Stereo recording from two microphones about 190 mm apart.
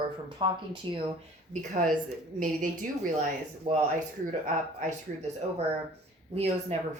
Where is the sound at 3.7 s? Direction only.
45° right (ahead or behind).